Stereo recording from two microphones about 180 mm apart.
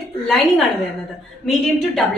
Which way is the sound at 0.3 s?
Centre (ahead or behind).